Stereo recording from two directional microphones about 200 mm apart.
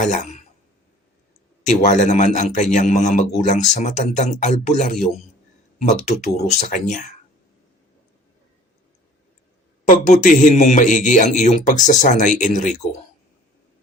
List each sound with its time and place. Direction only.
0.0 s speech: 35° left (ahead or behind)
1.6 s a man's voice: 35° left (ahead or behind)
9.9 s a man's voice: 40° left (ahead or behind)